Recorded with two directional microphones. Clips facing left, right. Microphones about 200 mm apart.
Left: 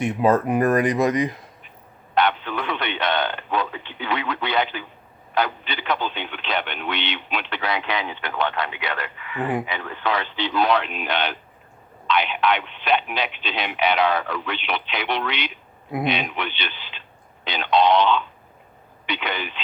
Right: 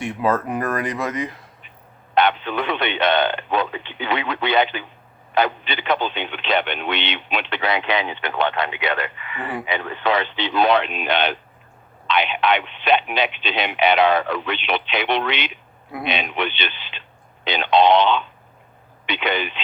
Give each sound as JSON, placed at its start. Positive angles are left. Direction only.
{"t": 0.0, "sound": "speech", "side_deg": 20}
{"t": 2.1, "sound": "radio", "side_deg": -20}
{"t": 3.5, "sound": "speech", "side_deg": -20}